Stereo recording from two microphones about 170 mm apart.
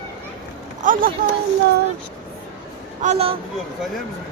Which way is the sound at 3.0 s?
40° right (ahead or behind).